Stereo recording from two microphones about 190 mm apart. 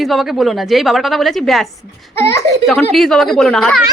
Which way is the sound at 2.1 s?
15° left (ahead or behind).